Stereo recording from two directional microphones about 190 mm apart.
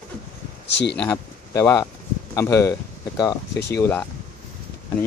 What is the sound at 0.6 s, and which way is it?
Speech, 65° left (ahead or behind).